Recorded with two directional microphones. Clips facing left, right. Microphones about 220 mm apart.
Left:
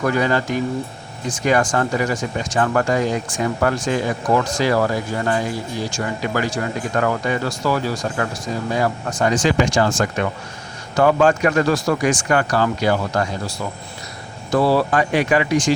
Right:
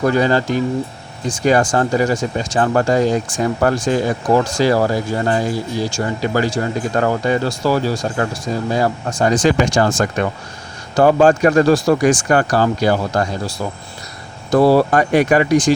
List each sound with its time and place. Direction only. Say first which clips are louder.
0.0 s speech: right 4 dB; 30° right (ahead or behind)